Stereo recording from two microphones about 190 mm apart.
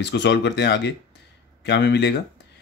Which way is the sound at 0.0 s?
65° left (ahead or behind).